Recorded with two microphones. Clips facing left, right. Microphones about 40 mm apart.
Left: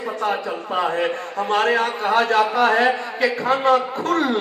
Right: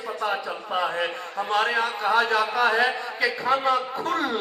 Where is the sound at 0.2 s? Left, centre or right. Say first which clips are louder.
Left 4 dB; left.